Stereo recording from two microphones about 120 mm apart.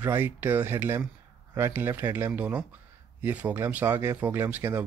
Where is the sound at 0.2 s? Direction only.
15° right (ahead or behind).